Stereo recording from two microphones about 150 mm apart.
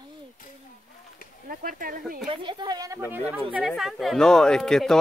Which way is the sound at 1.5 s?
75° right (ahead or behind).